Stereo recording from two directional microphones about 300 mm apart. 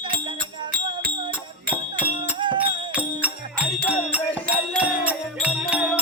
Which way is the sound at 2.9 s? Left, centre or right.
Centre.